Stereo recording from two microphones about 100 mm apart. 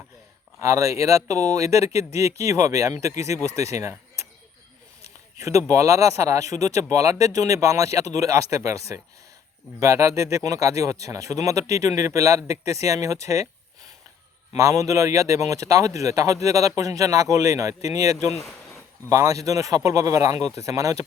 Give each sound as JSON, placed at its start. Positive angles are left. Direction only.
{"t": 0.6, "sound": "a man's voice", "side_deg": -30}
{"t": 5.4, "sound": "a man's voice", "side_deg": -30}
{"t": 9.8, "sound": "a man's voice", "side_deg": -30}